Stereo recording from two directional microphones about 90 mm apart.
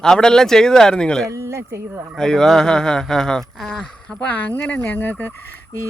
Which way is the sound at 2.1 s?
5° left (ahead or behind).